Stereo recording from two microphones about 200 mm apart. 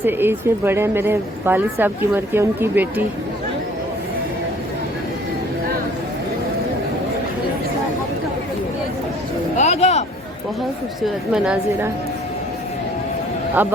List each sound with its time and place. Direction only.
0.0 s speech: 10° right (ahead or behind)
9.6 s a sound: 35° left (ahead or behind)
11.0 s a woman's voice: 5° right (ahead or behind)
13.6 s speech: 10° right (ahead or behind)